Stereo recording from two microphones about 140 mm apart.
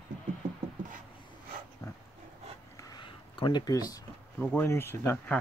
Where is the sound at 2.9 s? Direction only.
35° left (ahead or behind).